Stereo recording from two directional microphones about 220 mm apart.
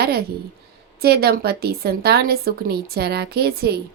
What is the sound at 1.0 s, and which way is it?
A woman's voice, 45° right (ahead or behind).